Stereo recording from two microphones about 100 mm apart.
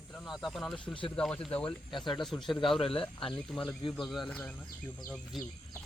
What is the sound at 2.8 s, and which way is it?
Speech, 65° left (ahead or behind).